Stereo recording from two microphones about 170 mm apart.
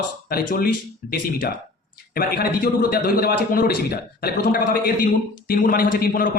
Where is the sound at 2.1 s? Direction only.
60° left (ahead or behind).